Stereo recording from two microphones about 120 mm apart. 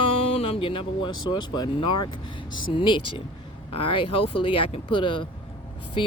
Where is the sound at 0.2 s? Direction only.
55° left (ahead or behind).